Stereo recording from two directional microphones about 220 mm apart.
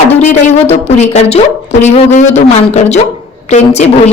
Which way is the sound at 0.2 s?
30° left (ahead or behind).